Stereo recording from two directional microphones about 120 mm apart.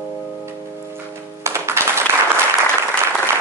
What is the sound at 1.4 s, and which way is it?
Music, 20° right (ahead or behind).